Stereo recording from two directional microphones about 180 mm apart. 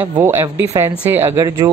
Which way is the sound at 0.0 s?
15° right (ahead or behind).